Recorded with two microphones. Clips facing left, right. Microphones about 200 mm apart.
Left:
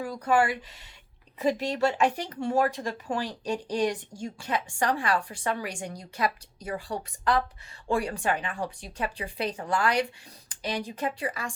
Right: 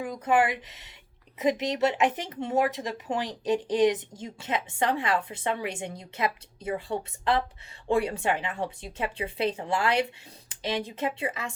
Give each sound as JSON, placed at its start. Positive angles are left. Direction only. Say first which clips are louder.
{"t": 0.0, "sound": "speech", "louder": "even", "side_deg": -20}